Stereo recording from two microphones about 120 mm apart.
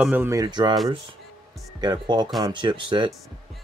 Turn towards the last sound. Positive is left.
turn(degrees=-40)  # may be behind; listen again after turning